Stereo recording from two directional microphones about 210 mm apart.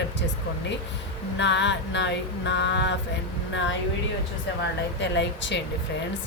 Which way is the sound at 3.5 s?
60° left (ahead or behind).